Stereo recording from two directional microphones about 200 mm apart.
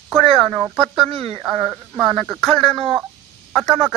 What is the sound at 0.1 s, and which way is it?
Speech, centre (ahead or behind).